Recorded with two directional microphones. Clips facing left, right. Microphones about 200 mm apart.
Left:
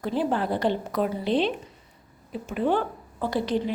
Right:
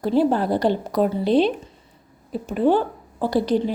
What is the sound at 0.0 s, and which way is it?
A woman's voice, 35° right (ahead or behind).